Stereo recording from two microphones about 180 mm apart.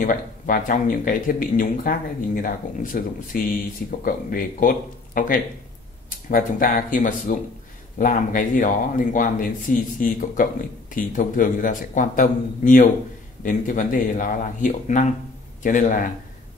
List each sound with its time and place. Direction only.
0.0 s speech: 50° left (ahead or behind)